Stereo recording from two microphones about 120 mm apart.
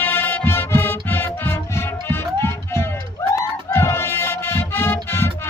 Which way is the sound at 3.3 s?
20° left (ahead or behind).